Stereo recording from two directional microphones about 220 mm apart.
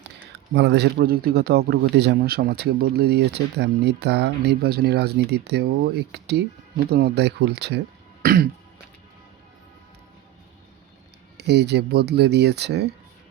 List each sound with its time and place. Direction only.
0.0 s speech: 50° right (ahead or behind)
8.2 s throat clearing: 40° right (ahead or behind)
11.3 s speech: 50° right (ahead or behind)